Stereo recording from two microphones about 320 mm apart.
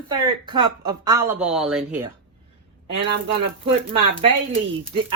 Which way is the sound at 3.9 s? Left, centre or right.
Centre.